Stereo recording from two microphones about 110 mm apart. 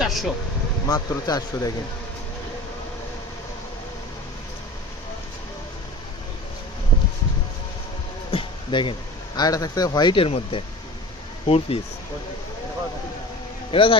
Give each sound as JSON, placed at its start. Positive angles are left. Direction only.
{"t": 0.0, "sound": "air conditioning", "side_deg": 0}
{"t": 0.9, "sound": "speech", "side_deg": 35}
{"t": 8.3, "sound": "speech", "side_deg": 50}
{"t": 10.2, "sound": "speech", "side_deg": 60}
{"t": 13.7, "sound": "speech", "side_deg": 55}